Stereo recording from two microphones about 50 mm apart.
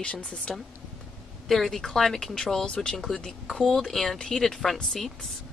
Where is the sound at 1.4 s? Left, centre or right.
Centre.